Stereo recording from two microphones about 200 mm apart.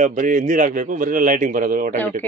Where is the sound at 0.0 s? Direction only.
40° right (ahead or behind).